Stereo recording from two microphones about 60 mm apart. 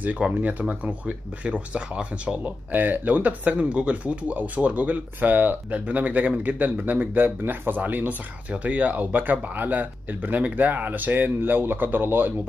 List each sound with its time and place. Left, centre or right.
0.0 s speech: right
2.7 s speech: right